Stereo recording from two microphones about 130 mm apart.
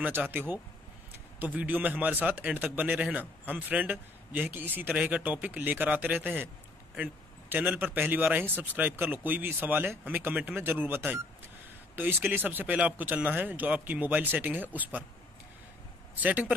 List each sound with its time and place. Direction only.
0.0 s a man's voice: 15° right (ahead or behind)
16.2 s a man's voice: 10° right (ahead or behind)